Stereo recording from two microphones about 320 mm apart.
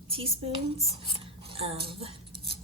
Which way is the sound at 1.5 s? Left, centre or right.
Centre.